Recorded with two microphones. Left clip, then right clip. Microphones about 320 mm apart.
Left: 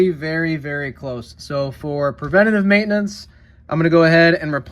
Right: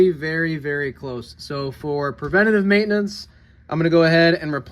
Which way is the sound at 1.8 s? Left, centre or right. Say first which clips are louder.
Left 3 dB; left.